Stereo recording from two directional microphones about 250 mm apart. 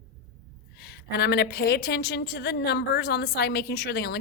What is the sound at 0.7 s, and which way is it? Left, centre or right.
A woman's voice, left.